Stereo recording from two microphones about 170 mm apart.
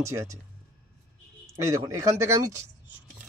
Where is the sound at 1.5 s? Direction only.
20° right (ahead or behind).